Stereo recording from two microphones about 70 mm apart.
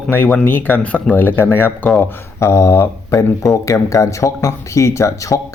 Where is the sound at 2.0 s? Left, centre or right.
Left.